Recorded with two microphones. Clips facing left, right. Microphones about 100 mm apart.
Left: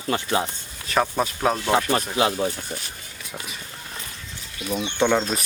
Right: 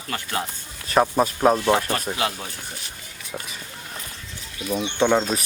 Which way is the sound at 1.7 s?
25° left (ahead or behind).